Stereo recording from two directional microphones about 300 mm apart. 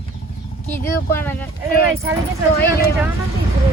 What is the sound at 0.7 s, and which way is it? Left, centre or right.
Speech, centre.